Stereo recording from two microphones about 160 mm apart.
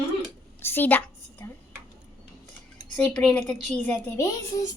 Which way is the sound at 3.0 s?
5° left (ahead or behind).